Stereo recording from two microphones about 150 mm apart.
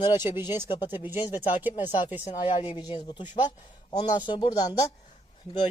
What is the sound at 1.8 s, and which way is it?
A man's voice, 30° left (ahead or behind).